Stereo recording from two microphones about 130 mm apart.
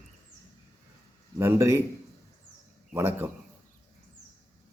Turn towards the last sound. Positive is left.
turn(degrees=-20)  # may be behind; listen again after turning